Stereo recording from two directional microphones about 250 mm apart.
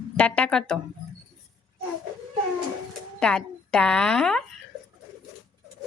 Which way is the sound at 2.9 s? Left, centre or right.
Centre.